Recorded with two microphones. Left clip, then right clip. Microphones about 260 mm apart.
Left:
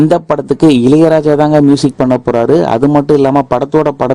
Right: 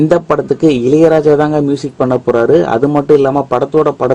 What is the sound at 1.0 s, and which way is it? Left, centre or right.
A man's voice, left.